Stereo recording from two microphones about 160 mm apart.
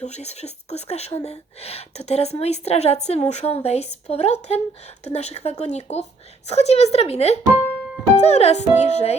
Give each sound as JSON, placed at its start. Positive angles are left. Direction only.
{"t": 0.0, "sound": "speech", "side_deg": 45}